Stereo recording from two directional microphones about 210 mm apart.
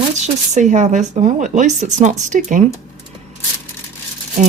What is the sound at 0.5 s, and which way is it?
Speech, 35° right (ahead or behind).